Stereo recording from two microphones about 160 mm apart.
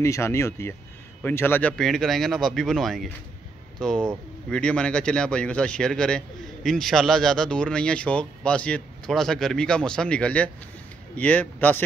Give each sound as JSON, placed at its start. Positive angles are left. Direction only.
{"t": 0.0, "sound": "a man's voice", "side_deg": 20}